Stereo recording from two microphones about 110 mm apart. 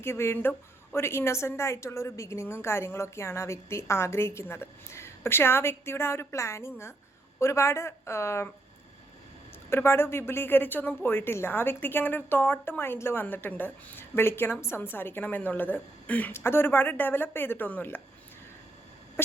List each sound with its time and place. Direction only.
0.0 s speech: 25° left (ahead or behind)
9.6 s speech: 20° left (ahead or behind)